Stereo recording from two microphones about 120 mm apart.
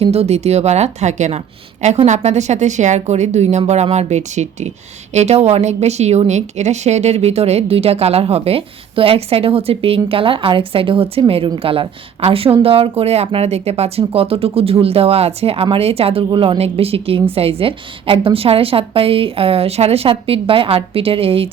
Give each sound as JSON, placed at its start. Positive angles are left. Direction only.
{"t": 0.0, "sound": "a woman's voice", "side_deg": -60}